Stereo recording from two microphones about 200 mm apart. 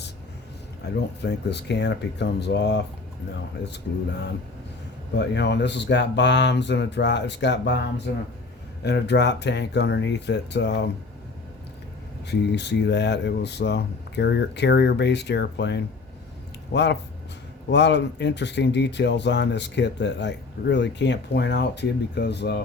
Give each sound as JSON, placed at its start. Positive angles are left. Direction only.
{"t": 1.2, "sound": "speech", "side_deg": 60}
{"t": 12.3, "sound": "speech", "side_deg": 60}